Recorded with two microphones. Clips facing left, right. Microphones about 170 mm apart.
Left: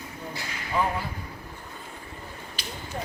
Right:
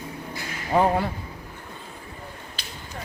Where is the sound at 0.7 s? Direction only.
60° right (ahead or behind).